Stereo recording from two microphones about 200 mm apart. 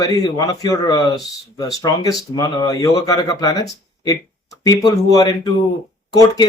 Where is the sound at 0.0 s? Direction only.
20° left (ahead or behind).